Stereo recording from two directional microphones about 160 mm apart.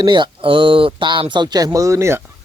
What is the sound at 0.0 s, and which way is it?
A man's voice, 30° right (ahead or behind).